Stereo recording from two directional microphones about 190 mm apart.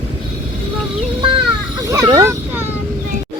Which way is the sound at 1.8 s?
15° right (ahead or behind).